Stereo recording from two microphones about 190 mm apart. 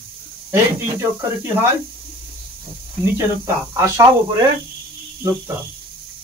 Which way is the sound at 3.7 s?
15° right (ahead or behind).